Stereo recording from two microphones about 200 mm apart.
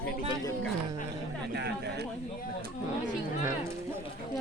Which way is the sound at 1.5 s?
55° right (ahead or behind).